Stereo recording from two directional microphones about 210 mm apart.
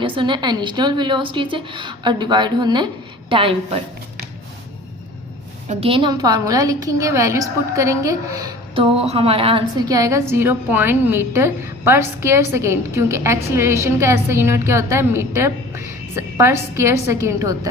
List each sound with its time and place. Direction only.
0.0 s a woman's voice: 25° right (ahead or behind)
5.6 s a woman's voice: 25° right (ahead or behind)